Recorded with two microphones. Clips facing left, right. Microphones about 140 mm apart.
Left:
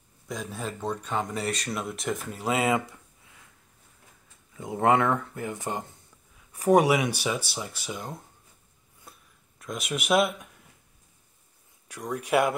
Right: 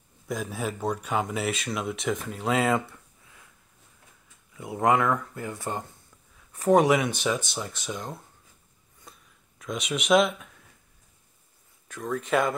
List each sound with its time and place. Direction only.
0.3 s speech: 5° right (ahead or behind)
4.6 s speech: 30° left (ahead or behind); by 8.2 s 5° left (ahead or behind)
9.1 s a sound: 5° left (ahead or behind)
9.6 s speech: centre (ahead or behind)
11.9 s speech: 15° left (ahead or behind)